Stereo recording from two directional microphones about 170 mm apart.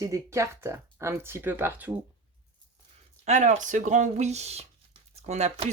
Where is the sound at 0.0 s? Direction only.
20° right (ahead or behind).